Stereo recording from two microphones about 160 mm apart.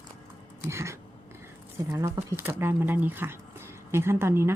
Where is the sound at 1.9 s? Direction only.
20° right (ahead or behind).